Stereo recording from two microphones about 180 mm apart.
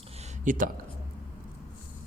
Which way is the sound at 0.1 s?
40° right (ahead or behind).